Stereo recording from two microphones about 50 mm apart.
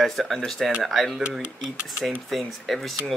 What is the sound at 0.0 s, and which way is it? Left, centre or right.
Speech, centre.